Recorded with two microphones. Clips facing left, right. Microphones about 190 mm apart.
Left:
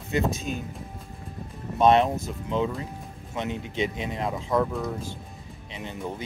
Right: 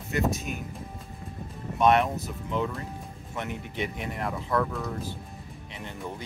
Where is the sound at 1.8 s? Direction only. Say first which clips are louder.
Left 3 dB; 30° left (ahead or behind).